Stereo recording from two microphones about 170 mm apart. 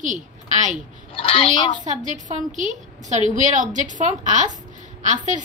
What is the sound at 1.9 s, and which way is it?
A woman's voice, 45° right (ahead or behind).